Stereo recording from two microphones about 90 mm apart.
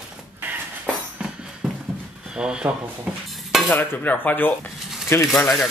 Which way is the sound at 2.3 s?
10° right (ahead or behind).